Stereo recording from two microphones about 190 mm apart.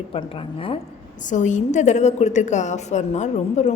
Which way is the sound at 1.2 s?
40° left (ahead or behind).